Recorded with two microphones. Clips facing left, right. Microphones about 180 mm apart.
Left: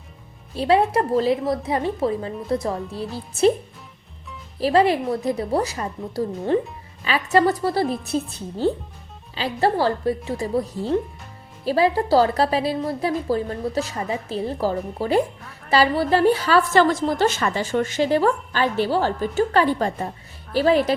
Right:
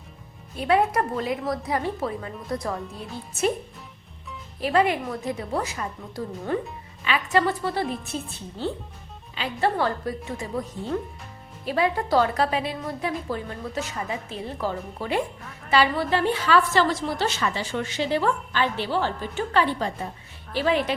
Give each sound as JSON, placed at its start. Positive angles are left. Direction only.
{"t": 0.5, "sound": "a woman's voice", "side_deg": 30}
{"t": 4.6, "sound": "a woman's voice", "side_deg": 35}
{"t": 15.4, "sound": "a sound", "side_deg": 0}
{"t": 15.7, "sound": "a woman's voice", "side_deg": 35}